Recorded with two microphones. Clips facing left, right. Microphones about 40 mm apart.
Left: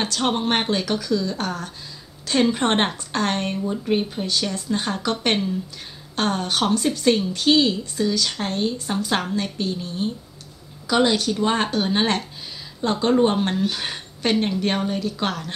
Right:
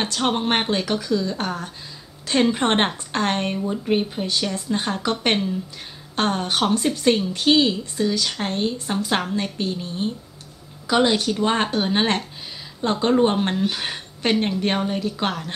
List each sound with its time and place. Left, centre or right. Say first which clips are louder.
0.2 s speech: right 1 dB; centre